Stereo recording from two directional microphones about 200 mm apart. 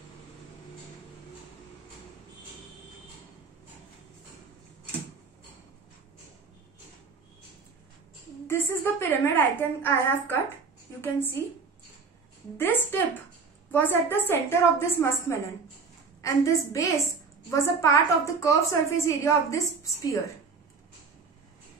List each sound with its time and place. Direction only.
8.5 s a woman's voice: 10° left (ahead or behind)
12.5 s a woman's voice: 10° left (ahead or behind)